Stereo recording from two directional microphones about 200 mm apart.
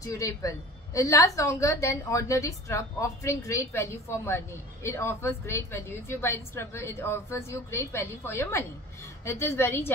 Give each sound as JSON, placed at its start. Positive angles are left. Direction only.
{"t": 0.0, "sound": "a woman's voice", "side_deg": 15}